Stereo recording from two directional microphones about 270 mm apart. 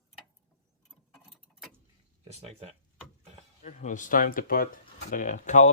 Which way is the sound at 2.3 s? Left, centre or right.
Right.